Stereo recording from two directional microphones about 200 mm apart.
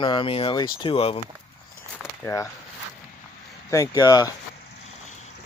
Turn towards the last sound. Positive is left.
turn(degrees=15)  # may be behind; listen again after turning